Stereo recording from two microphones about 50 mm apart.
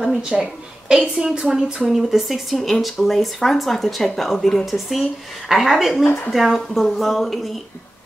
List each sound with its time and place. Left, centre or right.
0.4 s a woman's voice: centre
1.9 s speech: centre
4.6 s speech: centre
6.0 s speech: left
6.3 s speech: centre